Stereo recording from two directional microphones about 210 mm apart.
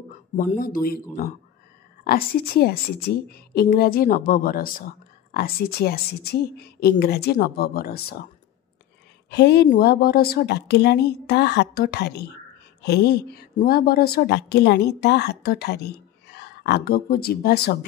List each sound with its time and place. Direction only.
0.5 s speech: 40° left (ahead or behind)
2.0 s a woman's voice: 45° left (ahead or behind)
9.3 s a woman's voice: 55° left (ahead or behind)